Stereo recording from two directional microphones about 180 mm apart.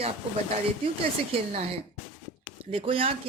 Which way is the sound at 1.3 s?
30° right (ahead or behind).